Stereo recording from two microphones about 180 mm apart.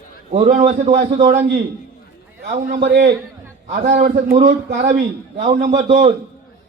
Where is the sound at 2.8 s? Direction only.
70° right (ahead or behind).